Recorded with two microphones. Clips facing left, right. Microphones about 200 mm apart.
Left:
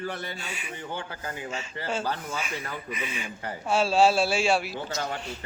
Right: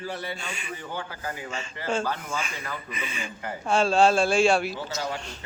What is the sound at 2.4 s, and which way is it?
Whoosh, 5° left (ahead or behind).